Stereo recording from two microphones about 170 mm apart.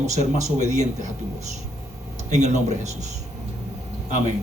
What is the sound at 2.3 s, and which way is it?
Speech, 40° right (ahead or behind).